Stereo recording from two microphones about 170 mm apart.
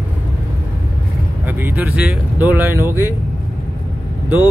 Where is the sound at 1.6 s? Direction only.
10° right (ahead or behind).